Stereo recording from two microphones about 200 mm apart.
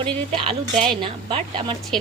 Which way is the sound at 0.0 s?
25° right (ahead or behind).